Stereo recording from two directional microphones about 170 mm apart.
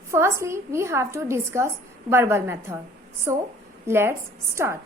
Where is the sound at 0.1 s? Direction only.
15° right (ahead or behind).